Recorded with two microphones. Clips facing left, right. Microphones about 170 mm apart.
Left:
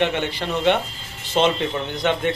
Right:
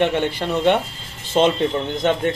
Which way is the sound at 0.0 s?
50° right (ahead or behind).